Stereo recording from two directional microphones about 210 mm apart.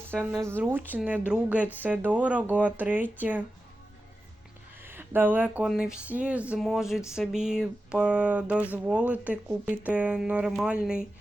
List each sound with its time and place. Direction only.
0.2 s speech: 10° right (ahead or behind)
4.8 s speech: 10° right (ahead or behind)
7.2 s a sound: 5° right (ahead or behind)